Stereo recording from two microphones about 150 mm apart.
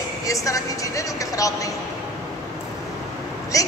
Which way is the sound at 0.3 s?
20° left (ahead or behind).